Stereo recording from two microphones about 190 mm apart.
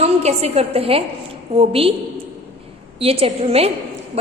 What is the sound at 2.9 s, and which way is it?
Speech, 30° right (ahead or behind).